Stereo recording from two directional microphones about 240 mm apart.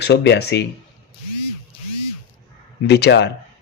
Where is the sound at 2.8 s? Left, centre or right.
Left.